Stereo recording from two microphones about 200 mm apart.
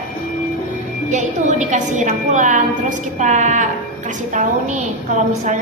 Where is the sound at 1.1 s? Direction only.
35° right (ahead or behind).